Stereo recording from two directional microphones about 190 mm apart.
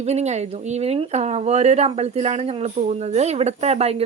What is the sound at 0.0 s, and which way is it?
Speech, 35° right (ahead or behind).